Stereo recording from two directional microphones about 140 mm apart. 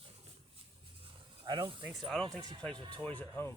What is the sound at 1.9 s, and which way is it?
Speech, centre (ahead or behind).